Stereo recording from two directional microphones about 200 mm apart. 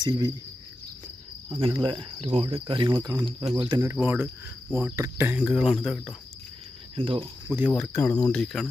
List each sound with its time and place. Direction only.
1.5 s speech: 25° right (ahead or behind); by 4.3 s 10° right (ahead or behind)
4.7 s cricket: 15° right (ahead or behind)
5.4 s speech: centre (ahead or behind)
7.0 s speech: 25° right (ahead or behind)
7.4 s speech: 10° right (ahead or behind)
7.7 s speech: 10° left (ahead or behind)